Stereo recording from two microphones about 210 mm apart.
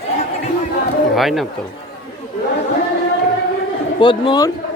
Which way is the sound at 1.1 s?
Centre (ahead or behind).